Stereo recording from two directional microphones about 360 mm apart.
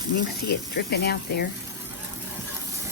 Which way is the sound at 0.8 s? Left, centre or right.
Left.